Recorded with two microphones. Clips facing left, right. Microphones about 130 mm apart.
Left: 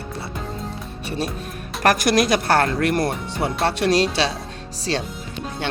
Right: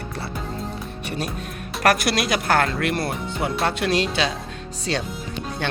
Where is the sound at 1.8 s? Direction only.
40° left (ahead or behind).